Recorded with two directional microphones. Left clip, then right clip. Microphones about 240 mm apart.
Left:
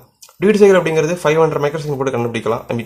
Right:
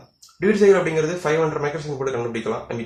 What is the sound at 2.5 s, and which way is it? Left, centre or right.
Speech, left.